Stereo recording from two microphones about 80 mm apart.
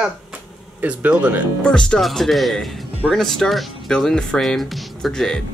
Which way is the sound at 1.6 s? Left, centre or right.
Centre.